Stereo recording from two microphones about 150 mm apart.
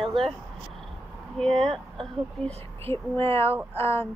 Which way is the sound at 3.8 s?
15° left (ahead or behind).